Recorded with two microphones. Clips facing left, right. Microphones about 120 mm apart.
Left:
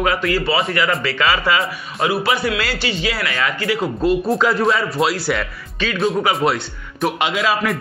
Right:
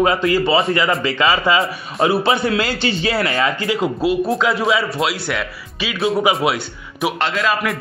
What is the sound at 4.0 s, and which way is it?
Speech, centre (ahead or behind).